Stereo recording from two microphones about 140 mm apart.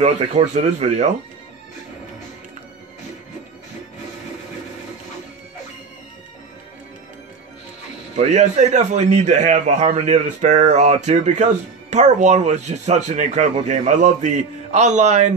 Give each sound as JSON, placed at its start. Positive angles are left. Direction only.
{"t": 0.0, "sound": "speech", "side_deg": -50}
{"t": 8.2, "sound": "a man's voice", "side_deg": -55}